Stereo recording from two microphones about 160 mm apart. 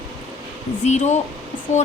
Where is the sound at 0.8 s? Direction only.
45° left (ahead or behind).